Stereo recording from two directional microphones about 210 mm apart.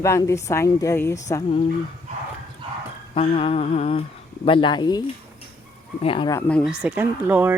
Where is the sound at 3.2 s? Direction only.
25° left (ahead or behind).